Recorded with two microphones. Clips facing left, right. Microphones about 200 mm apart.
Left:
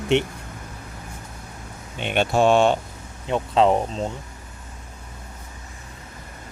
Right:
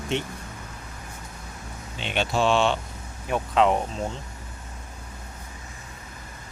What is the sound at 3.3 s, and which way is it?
Speech, 30° left (ahead or behind).